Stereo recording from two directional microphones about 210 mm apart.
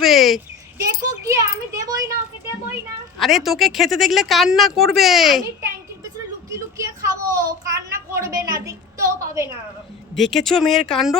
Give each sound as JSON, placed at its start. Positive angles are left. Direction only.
{"t": 0.0, "sound": "a sound", "side_deg": 0}
{"t": 0.9, "sound": "a child's voice", "side_deg": -15}
{"t": 3.2, "sound": "speech", "side_deg": 0}
{"t": 6.6, "sound": "a sound", "side_deg": -15}
{"t": 8.4, "sound": "a child's voice", "side_deg": -15}
{"t": 10.2, "sound": "speech", "side_deg": 0}